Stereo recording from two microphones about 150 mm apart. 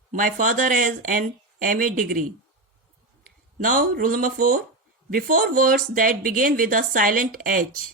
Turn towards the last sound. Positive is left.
turn(degrees=-70)  # may be behind; listen again after turning